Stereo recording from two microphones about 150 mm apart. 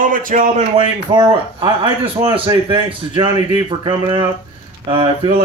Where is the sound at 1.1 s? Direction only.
35° right (ahead or behind).